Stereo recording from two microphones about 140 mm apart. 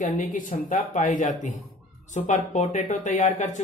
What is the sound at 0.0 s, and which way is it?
Speech, 70° left (ahead or behind).